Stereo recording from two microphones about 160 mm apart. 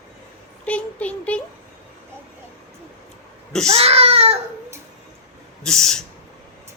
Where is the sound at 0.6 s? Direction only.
10° left (ahead or behind).